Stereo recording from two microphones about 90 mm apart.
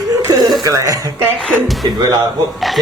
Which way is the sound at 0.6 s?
40° right (ahead or behind).